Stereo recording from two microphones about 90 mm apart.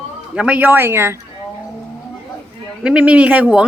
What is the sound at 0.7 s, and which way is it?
Speech, 25° right (ahead or behind).